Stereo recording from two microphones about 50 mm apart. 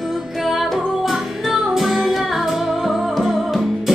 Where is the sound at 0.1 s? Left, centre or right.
Centre.